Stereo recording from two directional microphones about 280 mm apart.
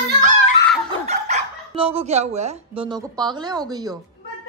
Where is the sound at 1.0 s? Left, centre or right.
Right.